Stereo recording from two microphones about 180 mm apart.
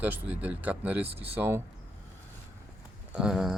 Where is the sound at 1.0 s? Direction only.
35° right (ahead or behind).